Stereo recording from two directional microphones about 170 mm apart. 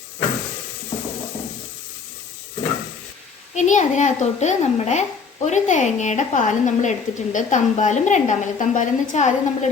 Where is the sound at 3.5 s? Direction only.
45° left (ahead or behind).